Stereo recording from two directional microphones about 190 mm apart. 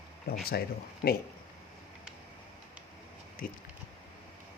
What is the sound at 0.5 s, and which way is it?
Speech, 55° left (ahead or behind).